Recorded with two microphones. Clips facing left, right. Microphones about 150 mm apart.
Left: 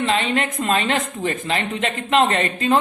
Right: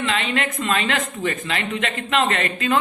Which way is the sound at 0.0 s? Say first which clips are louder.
Left 3 dB; 40° left (ahead or behind).